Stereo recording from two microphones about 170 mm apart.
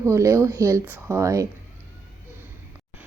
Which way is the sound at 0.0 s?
15° right (ahead or behind).